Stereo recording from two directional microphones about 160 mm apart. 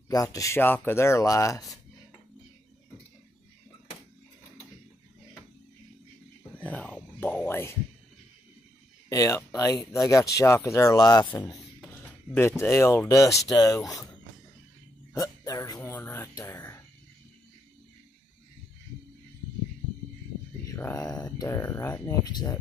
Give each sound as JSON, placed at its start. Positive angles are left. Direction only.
{"t": 0.1, "sound": "speech", "side_deg": 20}
{"t": 6.6, "sound": "a sound", "side_deg": 10}
{"t": 9.1, "sound": "speech", "side_deg": 20}
{"t": 11.8, "sound": "speech", "side_deg": 10}
{"t": 15.1, "sound": "a sound", "side_deg": 20}
{"t": 20.6, "sound": "speech", "side_deg": 15}